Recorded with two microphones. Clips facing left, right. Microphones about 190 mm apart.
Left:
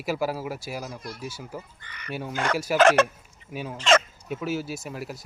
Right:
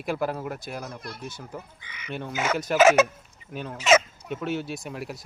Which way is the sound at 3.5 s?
5° left (ahead or behind).